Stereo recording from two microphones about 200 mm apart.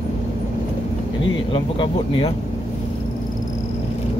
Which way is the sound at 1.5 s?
25° left (ahead or behind).